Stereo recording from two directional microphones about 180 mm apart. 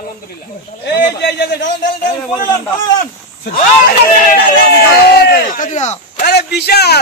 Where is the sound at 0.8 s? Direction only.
70° left (ahead or behind).